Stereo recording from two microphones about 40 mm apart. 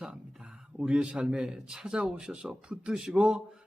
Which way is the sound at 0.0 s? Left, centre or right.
Centre.